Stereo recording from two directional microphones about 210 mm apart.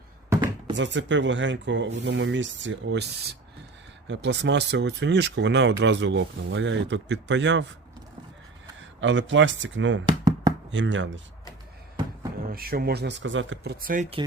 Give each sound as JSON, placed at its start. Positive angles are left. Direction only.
{"t": 0.3, "sound": "a sound", "side_deg": -15}
{"t": 0.8, "sound": "speech", "side_deg": -60}
{"t": 4.0, "sound": "speech", "side_deg": -55}
{"t": 8.8, "sound": "speech", "side_deg": -65}
{"t": 10.1, "sound": "a sound", "side_deg": -20}
{"t": 10.7, "sound": "speech", "side_deg": -60}
{"t": 12.5, "sound": "speech", "side_deg": -45}
{"t": 13.8, "sound": "speech", "side_deg": -40}